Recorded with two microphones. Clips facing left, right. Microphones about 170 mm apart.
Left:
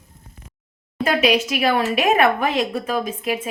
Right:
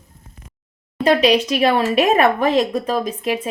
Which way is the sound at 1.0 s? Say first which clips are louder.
Right 4 dB; 30° right (ahead or behind).